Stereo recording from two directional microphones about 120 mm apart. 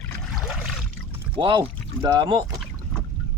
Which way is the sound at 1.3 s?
45° right (ahead or behind).